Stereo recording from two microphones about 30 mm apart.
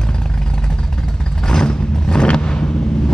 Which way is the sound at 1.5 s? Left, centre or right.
Left.